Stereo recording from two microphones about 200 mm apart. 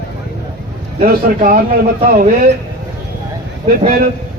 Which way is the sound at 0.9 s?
45° right (ahead or behind).